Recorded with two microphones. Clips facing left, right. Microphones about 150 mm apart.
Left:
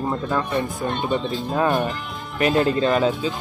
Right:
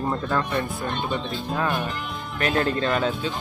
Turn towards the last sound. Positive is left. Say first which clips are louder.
# left 4 dB
turn(degrees=5)  # may be behind; listen again after turning